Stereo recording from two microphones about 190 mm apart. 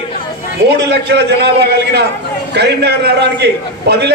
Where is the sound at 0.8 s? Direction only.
65° right (ahead or behind).